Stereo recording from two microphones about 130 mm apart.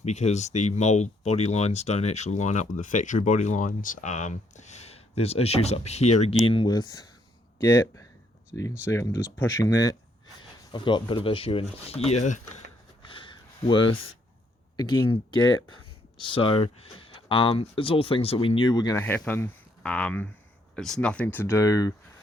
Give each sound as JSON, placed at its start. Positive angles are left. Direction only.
{"t": 0.0, "sound": "speech", "side_deg": 60}
{"t": 7.6, "sound": "speech", "side_deg": 20}
{"t": 10.7, "sound": "speech", "side_deg": 40}
{"t": 13.0, "sound": "a sound", "side_deg": 40}
{"t": 14.8, "sound": "speech", "side_deg": 35}
{"t": 18.9, "sound": "speech", "side_deg": 15}